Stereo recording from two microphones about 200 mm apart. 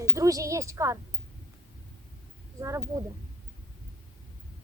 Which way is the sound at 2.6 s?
15° right (ahead or behind).